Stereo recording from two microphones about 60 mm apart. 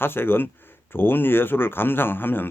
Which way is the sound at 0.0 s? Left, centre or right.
Left.